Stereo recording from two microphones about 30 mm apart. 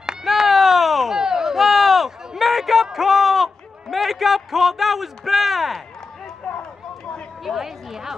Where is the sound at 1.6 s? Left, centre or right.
Centre.